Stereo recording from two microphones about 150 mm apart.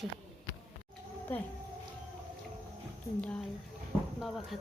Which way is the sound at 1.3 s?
10° left (ahead or behind).